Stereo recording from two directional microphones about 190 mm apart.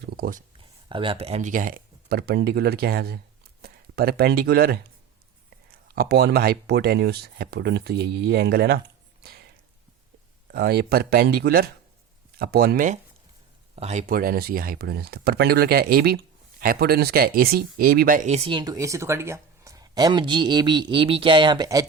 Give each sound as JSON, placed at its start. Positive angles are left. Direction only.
{"t": 0.2, "sound": "speech", "side_deg": -45}
{"t": 0.9, "sound": "speech", "side_deg": -25}
{"t": 10.5, "sound": "speech", "side_deg": -55}